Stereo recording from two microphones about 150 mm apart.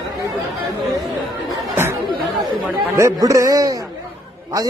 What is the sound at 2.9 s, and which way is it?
Speech, 20° right (ahead or behind).